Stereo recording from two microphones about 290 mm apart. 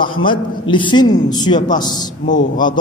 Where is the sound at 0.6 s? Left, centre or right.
Centre.